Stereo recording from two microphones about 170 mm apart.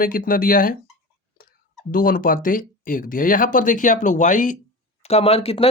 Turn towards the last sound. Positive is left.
turn(degrees=35)  # may be behind; listen again after turning